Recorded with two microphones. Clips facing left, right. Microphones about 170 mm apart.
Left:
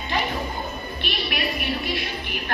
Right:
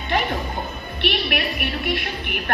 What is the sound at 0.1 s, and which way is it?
Music, 60° right (ahead or behind).